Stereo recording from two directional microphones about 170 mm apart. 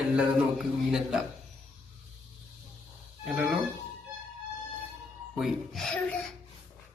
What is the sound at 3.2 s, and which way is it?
Speech, centre (ahead or behind).